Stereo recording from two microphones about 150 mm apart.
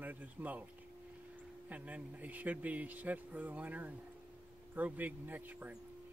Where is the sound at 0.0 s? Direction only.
10° right (ahead or behind).